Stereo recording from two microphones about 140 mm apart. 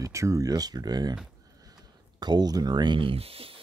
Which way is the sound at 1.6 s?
30° right (ahead or behind).